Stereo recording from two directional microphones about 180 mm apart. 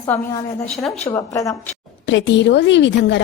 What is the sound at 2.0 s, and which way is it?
A woman's voice, 85° left.